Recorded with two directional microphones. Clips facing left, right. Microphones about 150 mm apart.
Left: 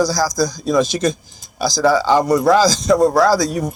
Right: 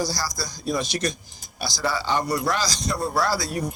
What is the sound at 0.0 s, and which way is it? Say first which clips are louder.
Speech: left 11 dB; 90° left.